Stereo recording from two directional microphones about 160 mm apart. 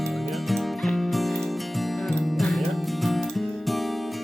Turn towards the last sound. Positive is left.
turn(degrees=0)  # may be behind; listen again after turning